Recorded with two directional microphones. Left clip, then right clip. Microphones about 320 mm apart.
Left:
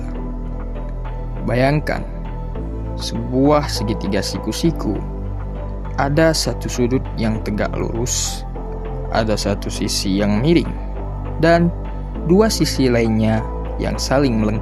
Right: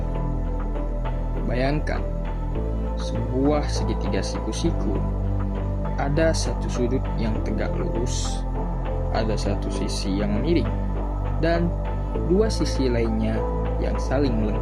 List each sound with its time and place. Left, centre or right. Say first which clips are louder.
1.5 s speech: left 8 dB; left
3.4 s speech: left 8 dB; left
6.0 s speech: left 7 dB; left